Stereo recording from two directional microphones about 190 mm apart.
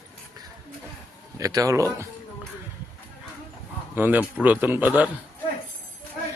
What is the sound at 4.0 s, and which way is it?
A man's voice, 10° right (ahead or behind).